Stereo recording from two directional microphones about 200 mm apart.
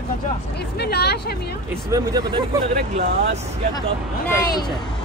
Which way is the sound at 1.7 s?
15° right (ahead or behind).